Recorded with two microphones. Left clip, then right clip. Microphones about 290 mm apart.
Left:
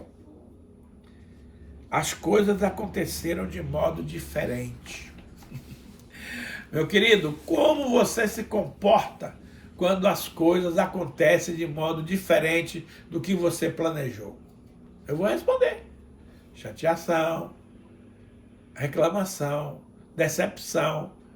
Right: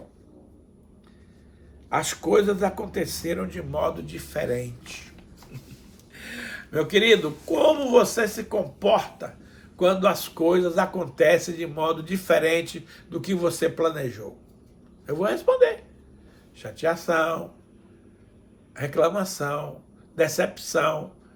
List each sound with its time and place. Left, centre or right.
1.9 s speech: centre
6.1 s speech: centre
18.7 s speech: centre